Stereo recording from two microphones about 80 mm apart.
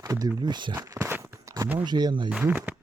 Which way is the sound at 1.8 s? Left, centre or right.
Right.